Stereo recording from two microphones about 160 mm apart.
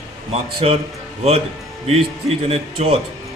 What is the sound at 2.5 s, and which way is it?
Speech, 40° right (ahead or behind).